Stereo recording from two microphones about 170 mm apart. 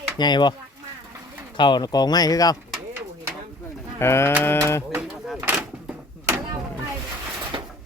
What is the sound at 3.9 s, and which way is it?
Speech, 15° left (ahead or behind).